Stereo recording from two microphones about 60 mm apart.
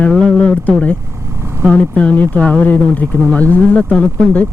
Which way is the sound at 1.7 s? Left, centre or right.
Left.